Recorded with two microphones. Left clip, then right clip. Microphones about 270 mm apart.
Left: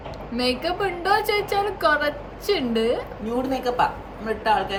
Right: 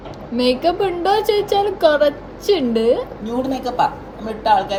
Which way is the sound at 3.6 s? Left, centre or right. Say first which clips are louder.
Right 4 dB; right.